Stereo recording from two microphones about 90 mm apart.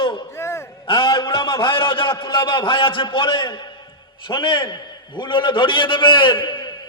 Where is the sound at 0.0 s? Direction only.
65° left (ahead or behind).